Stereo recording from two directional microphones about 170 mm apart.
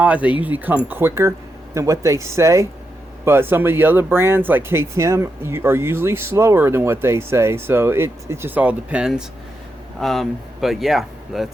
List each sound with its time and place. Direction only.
0.0 s speech: 10° right (ahead or behind)